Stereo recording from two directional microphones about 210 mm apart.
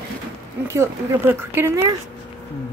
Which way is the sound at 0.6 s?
10° right (ahead or behind).